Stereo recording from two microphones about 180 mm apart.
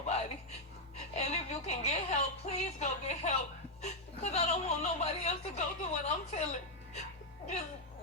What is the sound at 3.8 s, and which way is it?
Chuckle, 40° left (ahead or behind).